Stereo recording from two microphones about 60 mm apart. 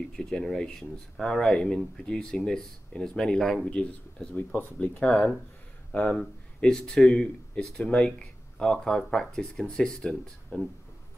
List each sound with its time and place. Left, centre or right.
0.1 s speech: centre
4.4 s speech: left
5.0 s speech: left; by 10.6 s centre